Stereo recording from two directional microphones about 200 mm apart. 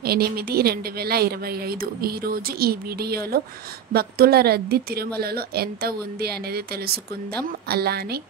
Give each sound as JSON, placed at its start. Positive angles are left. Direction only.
{"t": 0.0, "sound": "speech", "side_deg": -50}